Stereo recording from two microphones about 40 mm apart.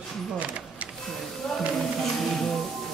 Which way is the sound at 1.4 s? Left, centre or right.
Centre.